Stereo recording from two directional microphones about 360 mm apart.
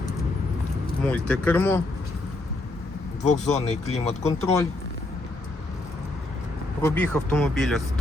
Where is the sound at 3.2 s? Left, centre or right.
Centre.